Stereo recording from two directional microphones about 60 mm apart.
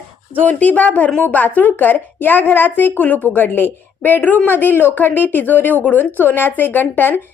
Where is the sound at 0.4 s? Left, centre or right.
Left.